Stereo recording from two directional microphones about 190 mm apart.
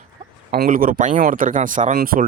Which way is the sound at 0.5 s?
50° right (ahead or behind).